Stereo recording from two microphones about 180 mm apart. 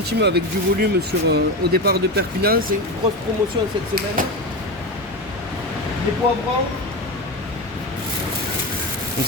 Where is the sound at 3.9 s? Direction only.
50° right (ahead or behind).